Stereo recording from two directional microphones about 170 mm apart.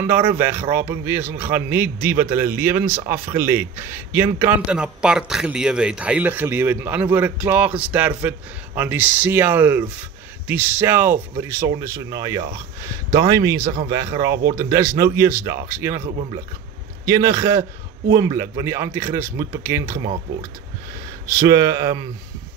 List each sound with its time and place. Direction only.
0.0 s a man's voice: 10° right (ahead or behind)
17.0 s speech: 20° right (ahead or behind)
21.3 s speech: 20° right (ahead or behind)